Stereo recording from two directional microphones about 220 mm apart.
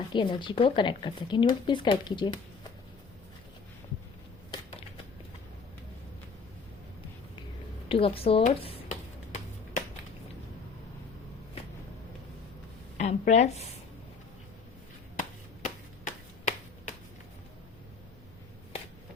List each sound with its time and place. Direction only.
0.1 s speech: 20° left (ahead or behind)
7.9 s a sound: 25° left (ahead or behind)
13.0 s speech: 30° left (ahead or behind)
15.6 s finger snapping: 35° left (ahead or behind)